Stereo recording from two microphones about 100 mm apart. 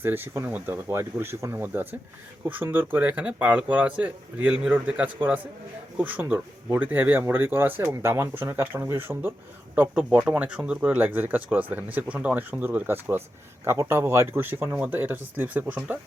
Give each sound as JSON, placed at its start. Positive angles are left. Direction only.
{"t": 0.0, "sound": "speech", "side_deg": -20}